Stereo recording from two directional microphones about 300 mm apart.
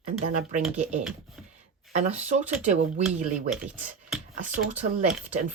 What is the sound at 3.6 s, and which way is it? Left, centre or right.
Speech, centre.